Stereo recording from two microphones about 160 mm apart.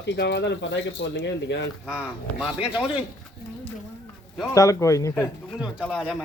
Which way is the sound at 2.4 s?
5° right (ahead or behind).